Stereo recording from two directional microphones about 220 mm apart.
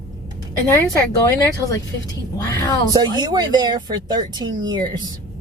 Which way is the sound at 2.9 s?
20° right (ahead or behind).